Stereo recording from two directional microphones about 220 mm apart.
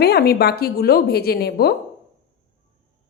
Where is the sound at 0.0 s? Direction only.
45° left (ahead or behind).